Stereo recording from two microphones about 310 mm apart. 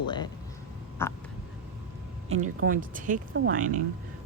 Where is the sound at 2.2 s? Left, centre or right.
Right.